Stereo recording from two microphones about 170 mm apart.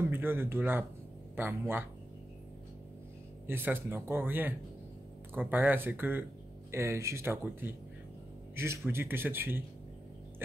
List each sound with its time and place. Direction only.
0.1 s speech: 15° right (ahead or behind)
3.4 s speech: 10° right (ahead or behind)